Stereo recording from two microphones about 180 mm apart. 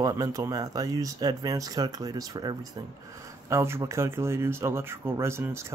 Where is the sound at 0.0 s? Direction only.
20° right (ahead or behind).